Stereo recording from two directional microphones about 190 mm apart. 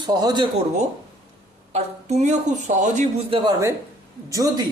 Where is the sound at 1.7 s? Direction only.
35° right (ahead or behind); by 4.6 s 20° right (ahead or behind).